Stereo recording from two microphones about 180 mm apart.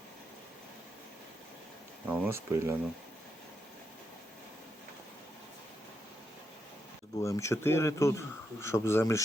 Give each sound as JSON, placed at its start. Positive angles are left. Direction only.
{"t": 2.0, "sound": "speech", "side_deg": -15}
{"t": 7.2, "sound": "speech", "side_deg": 15}